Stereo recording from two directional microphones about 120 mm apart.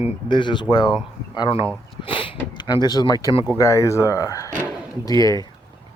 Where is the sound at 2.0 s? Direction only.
45° left (ahead or behind).